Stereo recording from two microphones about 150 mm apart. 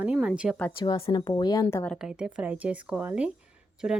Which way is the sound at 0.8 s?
35° left (ahead or behind).